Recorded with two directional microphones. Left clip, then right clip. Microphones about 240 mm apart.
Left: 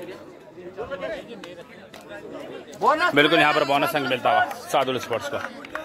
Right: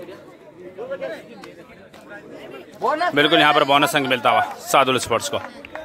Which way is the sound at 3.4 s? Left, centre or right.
Centre.